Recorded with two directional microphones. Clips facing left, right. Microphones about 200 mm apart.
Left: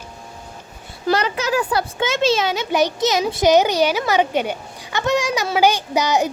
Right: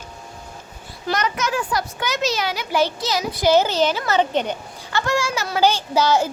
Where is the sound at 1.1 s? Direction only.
30° left (ahead or behind).